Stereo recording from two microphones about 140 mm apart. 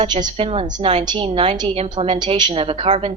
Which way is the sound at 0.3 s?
40° right (ahead or behind).